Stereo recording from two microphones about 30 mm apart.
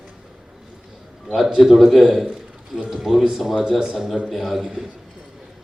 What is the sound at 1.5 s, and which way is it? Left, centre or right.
A man's voice, centre.